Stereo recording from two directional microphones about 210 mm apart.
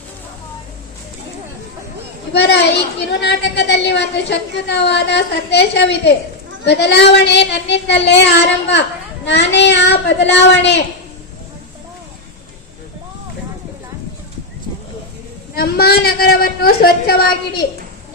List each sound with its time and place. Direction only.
2.3 s a woman's voice: 55° left (ahead or behind)
15.5 s a woman's voice: 45° left (ahead or behind)